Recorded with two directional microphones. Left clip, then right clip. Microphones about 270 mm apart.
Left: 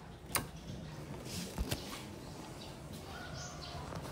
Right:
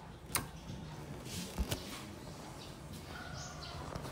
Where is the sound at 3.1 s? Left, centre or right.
Right.